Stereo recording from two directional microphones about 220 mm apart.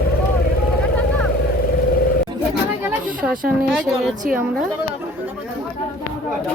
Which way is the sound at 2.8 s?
5° right (ahead or behind).